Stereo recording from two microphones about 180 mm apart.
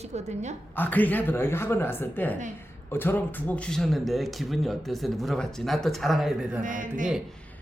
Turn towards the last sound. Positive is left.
turn(degrees=-45)  # may be behind; listen again after turning